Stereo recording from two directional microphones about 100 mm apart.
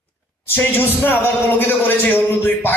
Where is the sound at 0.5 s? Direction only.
20° left (ahead or behind).